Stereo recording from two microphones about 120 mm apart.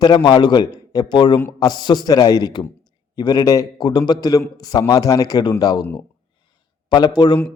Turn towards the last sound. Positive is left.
turn(degrees=35)  # may be behind; listen again after turning